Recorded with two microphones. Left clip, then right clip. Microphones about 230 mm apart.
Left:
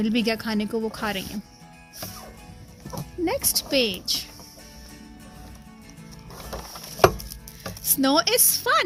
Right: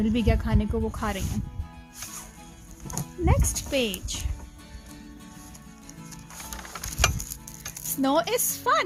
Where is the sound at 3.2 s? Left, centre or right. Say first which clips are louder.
Left 4 dB; left.